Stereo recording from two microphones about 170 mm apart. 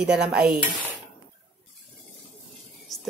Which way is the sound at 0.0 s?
5° right (ahead or behind).